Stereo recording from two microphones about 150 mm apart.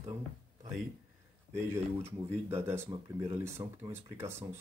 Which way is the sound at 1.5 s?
15° right (ahead or behind).